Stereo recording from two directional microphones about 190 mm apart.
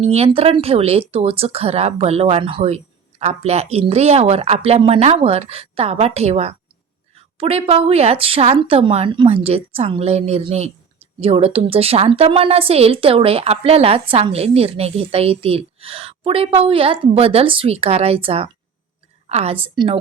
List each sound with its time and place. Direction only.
0.0 s speech: 35° right (ahead or behind)